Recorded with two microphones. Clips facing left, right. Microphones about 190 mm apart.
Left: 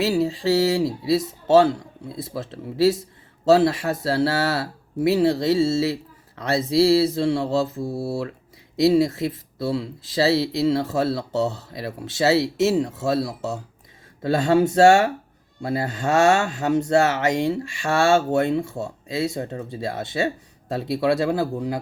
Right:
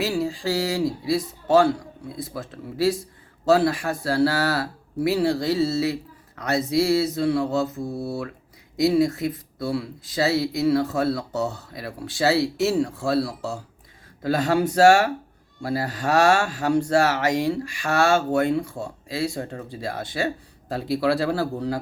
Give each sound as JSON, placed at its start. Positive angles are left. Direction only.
{"t": 0.0, "sound": "speech", "side_deg": 25}